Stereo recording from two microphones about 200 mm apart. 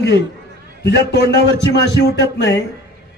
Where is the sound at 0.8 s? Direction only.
55° left (ahead or behind).